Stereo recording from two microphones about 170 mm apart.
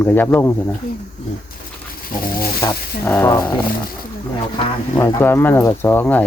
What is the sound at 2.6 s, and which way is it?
Speech, 15° left (ahead or behind).